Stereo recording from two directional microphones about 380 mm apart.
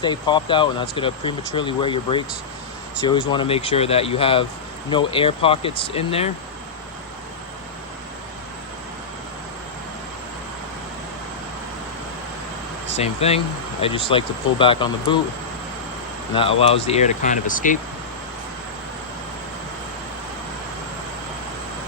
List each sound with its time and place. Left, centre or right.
0.0 s speech: centre
13.0 s speech: centre
16.3 s speech: centre